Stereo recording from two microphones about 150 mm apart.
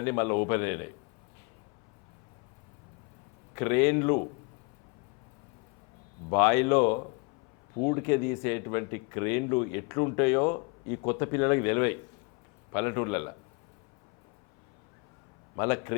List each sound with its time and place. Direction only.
0.0 s a man's voice: 15° left (ahead or behind)
3.5 s speech: 15° left (ahead or behind)
6.3 s a man's voice: 15° left (ahead or behind)
15.5 s a man's voice: 20° left (ahead or behind)